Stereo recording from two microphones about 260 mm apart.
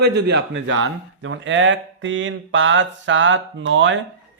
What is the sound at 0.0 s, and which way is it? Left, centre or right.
Speech, right.